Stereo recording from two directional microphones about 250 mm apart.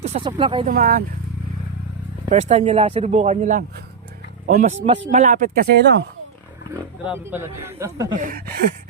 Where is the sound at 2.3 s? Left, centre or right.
Right.